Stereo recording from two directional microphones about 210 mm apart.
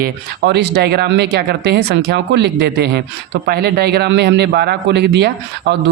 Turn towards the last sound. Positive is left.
turn(degrees=-55)  # may be behind; listen again after turning